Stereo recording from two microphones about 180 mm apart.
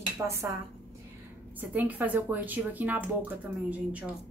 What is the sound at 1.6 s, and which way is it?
Speech, 10° right (ahead or behind).